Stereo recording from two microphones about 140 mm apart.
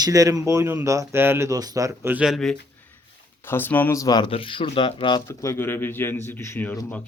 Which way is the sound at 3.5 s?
15° left (ahead or behind).